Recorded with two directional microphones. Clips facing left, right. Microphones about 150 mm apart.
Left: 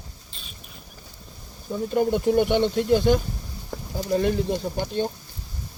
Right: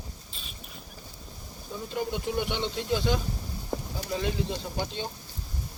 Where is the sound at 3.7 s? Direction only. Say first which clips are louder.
Right 2 dB; 20° right (ahead or behind).